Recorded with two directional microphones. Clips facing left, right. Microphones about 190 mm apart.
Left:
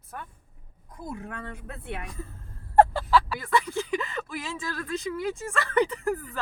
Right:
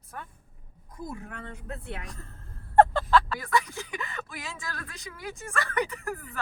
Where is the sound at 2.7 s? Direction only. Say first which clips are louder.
Even; 10° left (ahead or behind).